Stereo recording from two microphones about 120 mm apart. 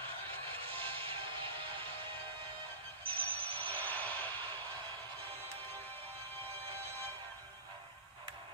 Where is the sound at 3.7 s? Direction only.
15° left (ahead or behind).